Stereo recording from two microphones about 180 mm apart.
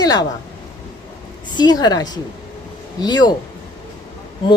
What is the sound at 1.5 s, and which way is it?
Speech, 25° left (ahead or behind).